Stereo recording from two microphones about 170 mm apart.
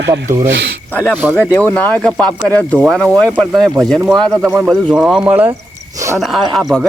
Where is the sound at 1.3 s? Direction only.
10° left (ahead or behind); by 5.5 s 10° right (ahead or behind).